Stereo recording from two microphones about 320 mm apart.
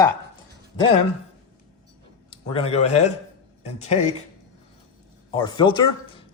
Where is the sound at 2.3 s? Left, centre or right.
Centre.